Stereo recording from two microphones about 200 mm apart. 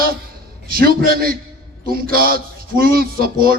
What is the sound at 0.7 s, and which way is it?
A man's voice, 50° right (ahead or behind).